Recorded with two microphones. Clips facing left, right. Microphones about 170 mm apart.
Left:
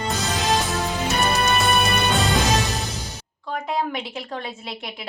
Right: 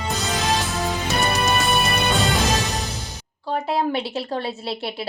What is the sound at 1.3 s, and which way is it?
Music, centre (ahead or behind).